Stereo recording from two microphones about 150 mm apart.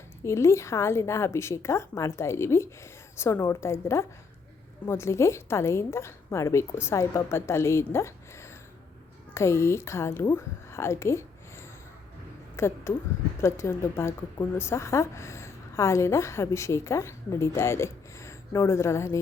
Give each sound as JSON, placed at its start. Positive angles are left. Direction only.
{"t": 0.3, "sound": "a woman's voice", "side_deg": 20}